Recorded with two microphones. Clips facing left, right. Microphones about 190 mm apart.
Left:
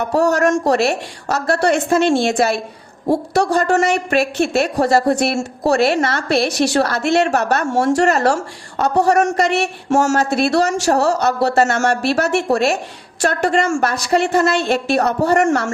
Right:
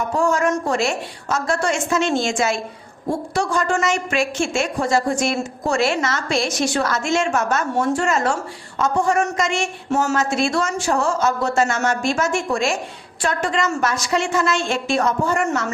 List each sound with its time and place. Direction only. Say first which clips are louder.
0.0 s a woman's voice: left 4 dB; 70° left (ahead or behind)
3.6 s a woman's voice: left 5 dB; 60° left (ahead or behind); by 15.7 s 80° left